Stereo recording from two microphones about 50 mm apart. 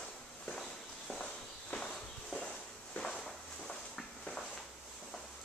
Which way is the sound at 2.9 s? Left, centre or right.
Centre.